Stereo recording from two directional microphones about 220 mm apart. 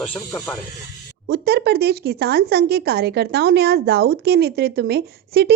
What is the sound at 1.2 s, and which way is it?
Speech, 45° right (ahead or behind).